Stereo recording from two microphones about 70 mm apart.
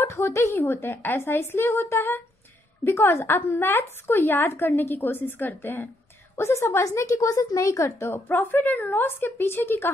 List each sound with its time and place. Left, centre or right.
0.0 s a woman's voice: left
0.6 s a woman's voice: left
7.0 s speech: left
8.1 s speech: left